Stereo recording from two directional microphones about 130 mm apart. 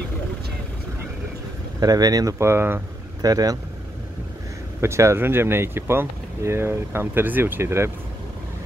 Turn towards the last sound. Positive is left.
turn(degrees=-20)  # may be behind; listen again after turning